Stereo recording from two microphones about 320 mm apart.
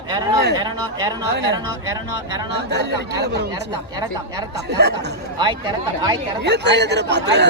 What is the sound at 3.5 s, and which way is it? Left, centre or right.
Speech, centre.